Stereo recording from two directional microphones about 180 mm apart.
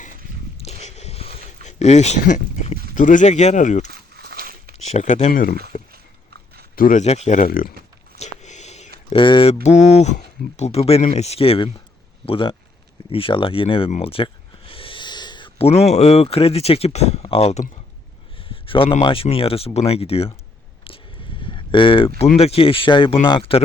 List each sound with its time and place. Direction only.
0.6 s a sound: 35° left (ahead or behind)
2.9 s speech: 45° left (ahead or behind)
3.8 s walk: 60° right (ahead or behind)
4.8 s speech: 40° left (ahead or behind)
5.9 s biting: 60° right (ahead or behind)
6.7 s speech: 45° left (ahead or behind)
8.2 s a sound: 40° left (ahead or behind)
9.0 s speech: 25° left (ahead or behind)
9.6 s speech: 40° left (ahead or behind)
20.8 s a sound: 30° left (ahead or behind)
22.4 s speech: 35° left (ahead or behind)